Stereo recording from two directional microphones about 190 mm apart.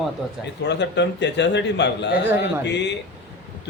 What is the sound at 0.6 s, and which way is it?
A man's voice, 65° left (ahead or behind).